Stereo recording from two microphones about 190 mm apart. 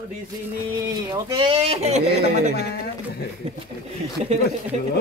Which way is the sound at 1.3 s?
30° right (ahead or behind).